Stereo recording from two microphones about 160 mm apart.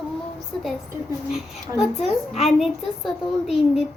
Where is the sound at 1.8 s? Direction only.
Centre (ahead or behind).